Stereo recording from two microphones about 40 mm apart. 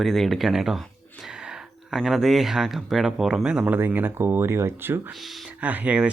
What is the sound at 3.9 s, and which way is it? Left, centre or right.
Speech, right.